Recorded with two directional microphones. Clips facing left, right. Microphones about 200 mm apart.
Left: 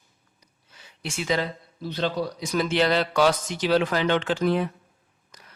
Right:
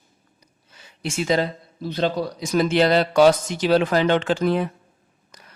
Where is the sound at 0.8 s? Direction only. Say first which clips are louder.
Right 6 dB; 45° right (ahead or behind).